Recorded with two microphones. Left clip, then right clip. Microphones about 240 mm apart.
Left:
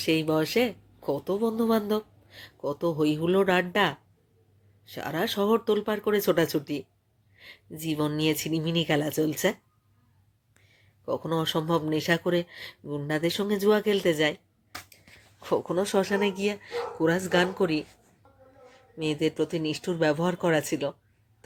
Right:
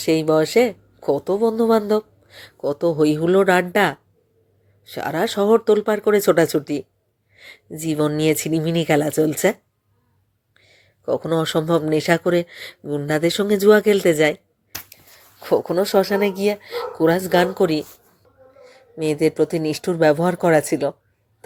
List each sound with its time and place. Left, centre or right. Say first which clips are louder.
0.0 s speech: right 8 dB; centre
10.6 s speech: right 8 dB; centre